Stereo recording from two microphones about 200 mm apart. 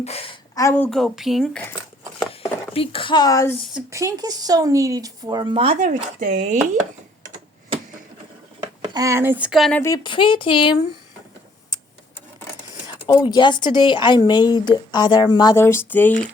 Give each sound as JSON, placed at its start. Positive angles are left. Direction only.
{"t": 0.0, "sound": "a woman's voice", "side_deg": 30}
{"t": 0.5, "sound": "a woman's voice", "side_deg": 15}
{"t": 2.4, "sound": "speech", "side_deg": 30}
{"t": 3.8, "sound": "speech", "side_deg": -15}
{"t": 5.8, "sound": "speech", "side_deg": -40}
{"t": 8.6, "sound": "speech", "side_deg": -20}
{"t": 9.8, "sound": "speech", "side_deg": 20}
{"t": 13.1, "sound": "speech", "side_deg": 20}